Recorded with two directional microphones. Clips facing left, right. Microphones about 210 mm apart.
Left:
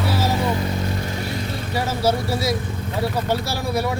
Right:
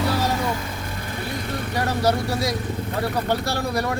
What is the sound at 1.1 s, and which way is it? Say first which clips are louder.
Vehicle: left 2 dB; 55° right (ahead or behind).